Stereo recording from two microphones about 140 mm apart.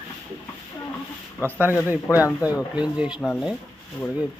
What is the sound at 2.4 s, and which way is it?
Speech, 10° right (ahead or behind).